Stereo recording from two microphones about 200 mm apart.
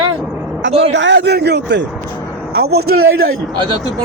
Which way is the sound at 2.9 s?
90° right.